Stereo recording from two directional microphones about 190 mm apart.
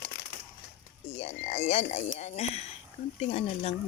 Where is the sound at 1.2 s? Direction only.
35° left (ahead or behind).